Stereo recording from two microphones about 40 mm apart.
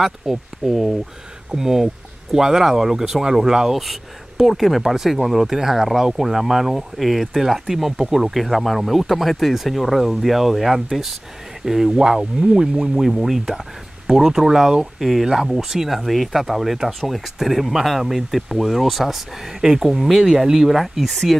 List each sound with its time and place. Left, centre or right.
0.0 s speech: centre
13.1 s speech: centre